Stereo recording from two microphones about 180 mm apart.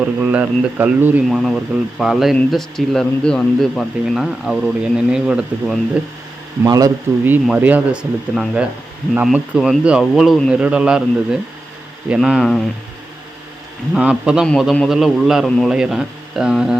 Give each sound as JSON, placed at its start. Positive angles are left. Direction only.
{"t": 0.0, "sound": "speech", "side_deg": -10}
{"t": 6.7, "sound": "speech", "side_deg": -20}
{"t": 13.9, "sound": "speech", "side_deg": -5}